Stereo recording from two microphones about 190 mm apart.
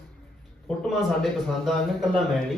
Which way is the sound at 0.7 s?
Centre (ahead or behind).